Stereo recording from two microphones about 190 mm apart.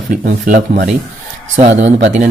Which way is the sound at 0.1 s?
45° right (ahead or behind).